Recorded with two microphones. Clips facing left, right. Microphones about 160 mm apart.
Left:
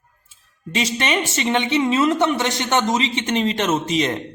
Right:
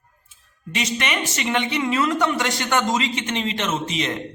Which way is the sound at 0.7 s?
30° left (ahead or behind).